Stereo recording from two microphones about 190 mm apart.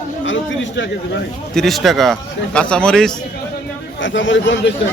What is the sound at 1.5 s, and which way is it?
A man's voice, centre (ahead or behind).